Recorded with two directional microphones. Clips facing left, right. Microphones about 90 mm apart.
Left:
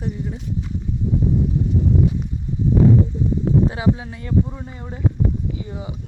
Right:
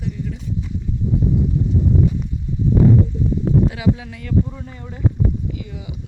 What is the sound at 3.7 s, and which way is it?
Speech, 30° left (ahead or behind).